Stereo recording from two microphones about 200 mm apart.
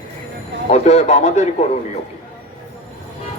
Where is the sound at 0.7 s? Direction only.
35° left (ahead or behind).